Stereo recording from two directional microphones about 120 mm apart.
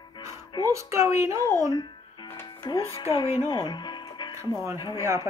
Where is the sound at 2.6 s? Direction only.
30° left (ahead or behind).